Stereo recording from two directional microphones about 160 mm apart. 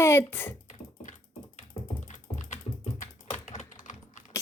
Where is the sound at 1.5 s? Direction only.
50° left (ahead or behind).